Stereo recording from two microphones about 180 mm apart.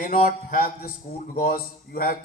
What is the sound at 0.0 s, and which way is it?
A man's voice, 50° left (ahead or behind).